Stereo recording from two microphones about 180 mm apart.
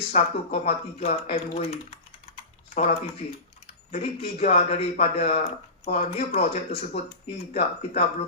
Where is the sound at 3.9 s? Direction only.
35° left (ahead or behind).